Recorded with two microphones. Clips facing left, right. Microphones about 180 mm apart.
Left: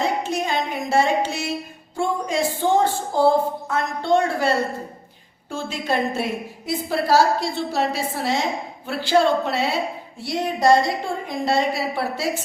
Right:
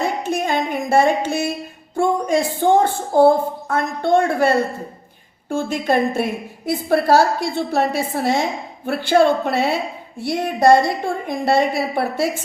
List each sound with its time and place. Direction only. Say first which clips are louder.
0.2 s speech: right 3 dB; 50° right (ahead or behind)